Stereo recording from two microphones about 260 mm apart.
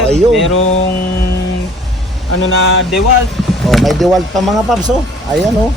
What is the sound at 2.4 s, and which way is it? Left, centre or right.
Speech, left.